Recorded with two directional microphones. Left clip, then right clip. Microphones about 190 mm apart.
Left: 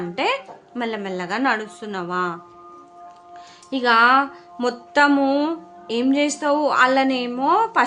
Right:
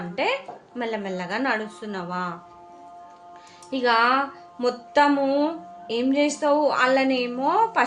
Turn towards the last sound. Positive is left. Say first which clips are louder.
# left 3 dB
turn(degrees=25)  # may be behind; listen again after turning